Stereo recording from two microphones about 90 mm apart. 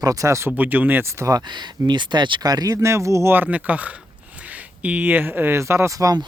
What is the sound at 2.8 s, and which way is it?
Speech, 35° right (ahead or behind).